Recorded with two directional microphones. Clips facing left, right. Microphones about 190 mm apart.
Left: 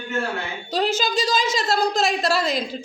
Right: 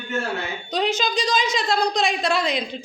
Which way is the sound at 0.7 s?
5° left (ahead or behind).